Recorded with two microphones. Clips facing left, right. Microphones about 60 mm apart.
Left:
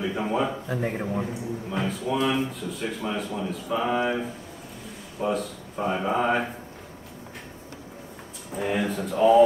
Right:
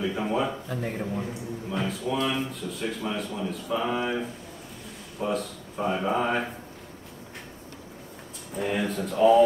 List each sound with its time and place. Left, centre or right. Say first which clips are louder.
0.0 s speech: left 1 dB; centre
1.2 s a man's voice: left 3 dB; centre
8.5 s a man's voice: left 1 dB; centre